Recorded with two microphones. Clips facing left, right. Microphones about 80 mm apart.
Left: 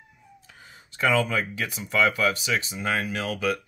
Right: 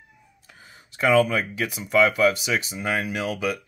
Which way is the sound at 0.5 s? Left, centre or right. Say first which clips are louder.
Right 3 dB; centre.